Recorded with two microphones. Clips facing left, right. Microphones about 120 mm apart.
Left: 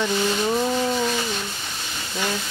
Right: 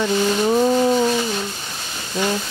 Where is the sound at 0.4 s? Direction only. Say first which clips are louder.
Right 6 dB; 20° right (ahead or behind).